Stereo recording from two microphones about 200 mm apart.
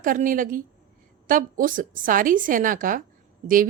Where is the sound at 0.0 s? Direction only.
40° right (ahead or behind).